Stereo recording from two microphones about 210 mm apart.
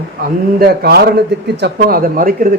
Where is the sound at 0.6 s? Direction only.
50° right (ahead or behind).